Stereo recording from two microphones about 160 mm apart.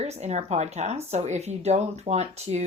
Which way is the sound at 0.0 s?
45° right (ahead or behind).